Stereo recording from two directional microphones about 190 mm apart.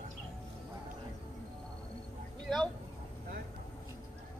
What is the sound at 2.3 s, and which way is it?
Dog, 25° right (ahead or behind).